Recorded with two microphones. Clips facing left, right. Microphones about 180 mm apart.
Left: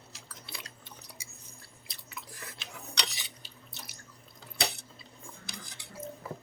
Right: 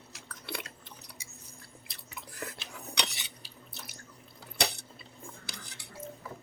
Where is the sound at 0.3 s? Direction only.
60° right (ahead or behind).